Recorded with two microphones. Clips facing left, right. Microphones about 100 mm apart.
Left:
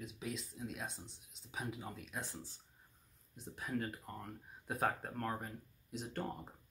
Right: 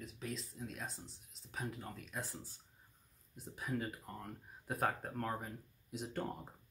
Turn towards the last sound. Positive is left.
turn(degrees=0)  # may be behind; listen again after turning